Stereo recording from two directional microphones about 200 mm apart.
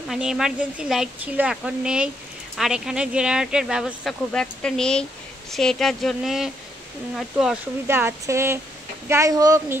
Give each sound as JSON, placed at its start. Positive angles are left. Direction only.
{"t": 0.1, "sound": "speech", "side_deg": -5}
{"t": 7.8, "sound": "speech", "side_deg": -10}